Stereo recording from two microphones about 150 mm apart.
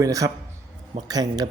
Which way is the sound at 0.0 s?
20° right (ahead or behind).